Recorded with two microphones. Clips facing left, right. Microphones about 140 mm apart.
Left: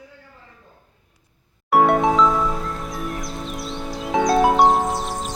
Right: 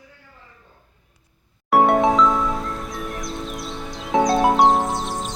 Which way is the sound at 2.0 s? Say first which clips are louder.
Even; centre (ahead or behind).